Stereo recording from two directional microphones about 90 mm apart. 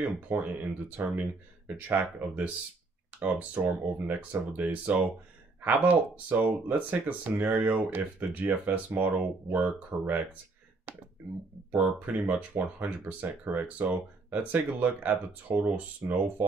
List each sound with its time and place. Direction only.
0.3 s speech: 20° right (ahead or behind)
11.7 s speech: 15° right (ahead or behind)